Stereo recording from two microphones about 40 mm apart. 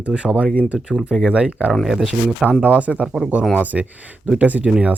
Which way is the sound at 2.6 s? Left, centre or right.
Right.